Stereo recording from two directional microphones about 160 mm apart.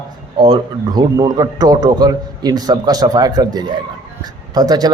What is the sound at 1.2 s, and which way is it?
Speech, 25° right (ahead or behind).